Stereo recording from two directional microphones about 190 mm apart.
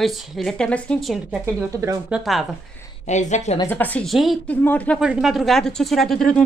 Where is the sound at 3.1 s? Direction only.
40° left (ahead or behind).